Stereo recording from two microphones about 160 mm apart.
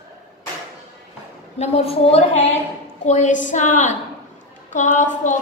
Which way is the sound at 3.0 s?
50° left (ahead or behind).